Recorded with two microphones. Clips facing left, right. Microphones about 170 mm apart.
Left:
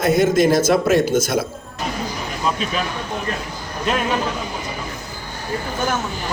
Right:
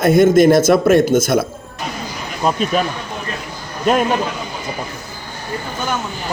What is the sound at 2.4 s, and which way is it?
Speech, 45° right (ahead or behind).